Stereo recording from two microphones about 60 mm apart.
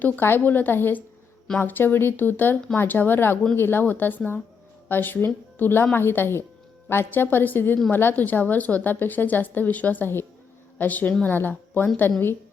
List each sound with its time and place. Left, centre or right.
0.0 s a woman's voice: left